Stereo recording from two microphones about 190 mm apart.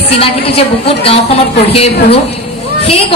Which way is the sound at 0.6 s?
30° left (ahead or behind).